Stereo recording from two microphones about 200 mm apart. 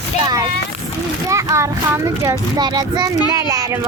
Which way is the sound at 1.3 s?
15° right (ahead or behind).